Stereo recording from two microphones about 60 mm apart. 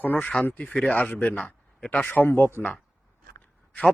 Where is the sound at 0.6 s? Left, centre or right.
Centre.